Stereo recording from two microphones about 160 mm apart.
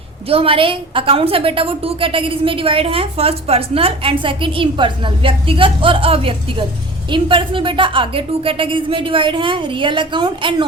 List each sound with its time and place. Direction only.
0.3 s a woman's voice: 35° right (ahead or behind)